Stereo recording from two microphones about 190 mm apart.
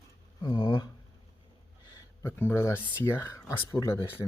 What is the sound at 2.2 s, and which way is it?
Speech, 15° left (ahead or behind).